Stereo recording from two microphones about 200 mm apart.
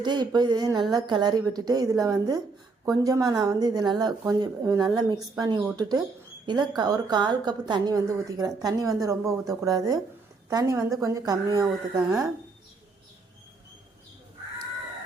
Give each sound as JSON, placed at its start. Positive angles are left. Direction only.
{"t": 0.0, "sound": "a woman's voice", "side_deg": -20}